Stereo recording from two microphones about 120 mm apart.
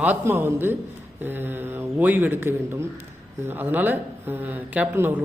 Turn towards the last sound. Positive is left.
turn(degrees=-15)  # may be behind; listen again after turning